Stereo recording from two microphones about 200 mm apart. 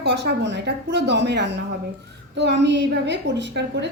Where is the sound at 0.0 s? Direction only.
60° right (ahead or behind).